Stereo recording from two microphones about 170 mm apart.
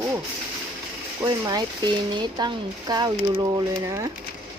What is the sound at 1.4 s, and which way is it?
Speech, 25° right (ahead or behind).